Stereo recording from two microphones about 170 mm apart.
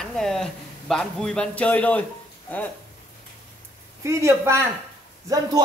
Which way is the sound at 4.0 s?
15° right (ahead or behind).